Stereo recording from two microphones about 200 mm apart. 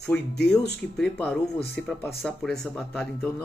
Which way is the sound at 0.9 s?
5° left (ahead or behind).